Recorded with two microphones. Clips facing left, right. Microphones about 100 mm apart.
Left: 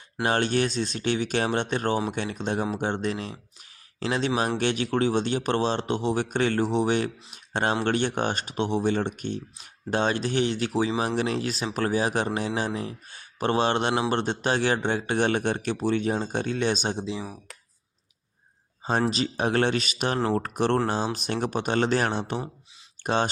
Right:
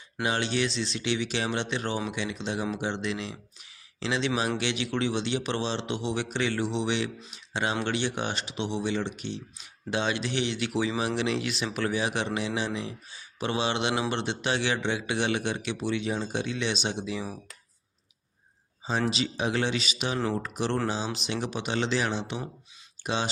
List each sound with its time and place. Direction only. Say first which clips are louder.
0.2 s speech: left 4 dB; 50° left (ahead or behind)
18.8 s a sound: left 4 dB; 50° left (ahead or behind)
19.0 s speech: left 3 dB; 45° left (ahead or behind)